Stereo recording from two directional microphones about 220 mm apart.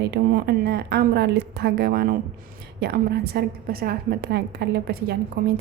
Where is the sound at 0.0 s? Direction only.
45° right (ahead or behind).